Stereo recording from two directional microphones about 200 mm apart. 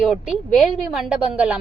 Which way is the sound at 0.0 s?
Centre (ahead or behind).